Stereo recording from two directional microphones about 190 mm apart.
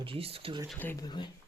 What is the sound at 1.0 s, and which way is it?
Speech, 20° left (ahead or behind).